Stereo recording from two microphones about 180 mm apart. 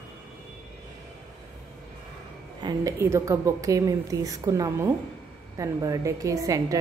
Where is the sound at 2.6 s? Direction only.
15° right (ahead or behind).